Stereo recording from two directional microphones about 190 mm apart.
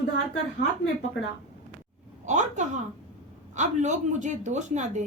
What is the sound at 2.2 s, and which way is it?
A woman's voice, 40° right (ahead or behind).